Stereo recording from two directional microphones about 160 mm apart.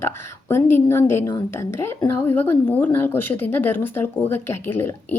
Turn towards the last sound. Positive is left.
turn(degrees=15)  # may be behind; listen again after turning